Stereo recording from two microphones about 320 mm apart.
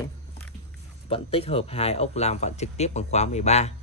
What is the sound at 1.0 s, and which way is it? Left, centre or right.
Speech, centre.